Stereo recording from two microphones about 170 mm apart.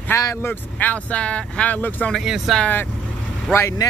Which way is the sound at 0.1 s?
15° left (ahead or behind).